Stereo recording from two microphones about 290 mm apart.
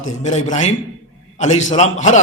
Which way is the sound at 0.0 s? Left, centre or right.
Left.